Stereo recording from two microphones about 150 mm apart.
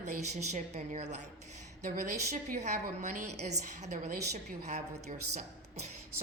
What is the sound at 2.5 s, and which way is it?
Speech, 55° right (ahead or behind).